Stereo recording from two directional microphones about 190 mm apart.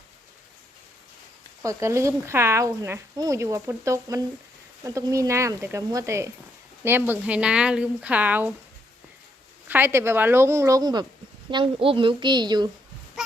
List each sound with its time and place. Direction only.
1.6 s speech: 15° right (ahead or behind)
9.6 s a woman's voice: 10° right (ahead or behind)